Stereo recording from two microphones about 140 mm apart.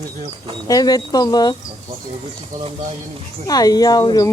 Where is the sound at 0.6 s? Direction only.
25° left (ahead or behind).